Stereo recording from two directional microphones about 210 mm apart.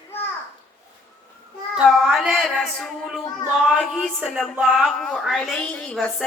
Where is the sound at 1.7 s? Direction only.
Centre (ahead or behind).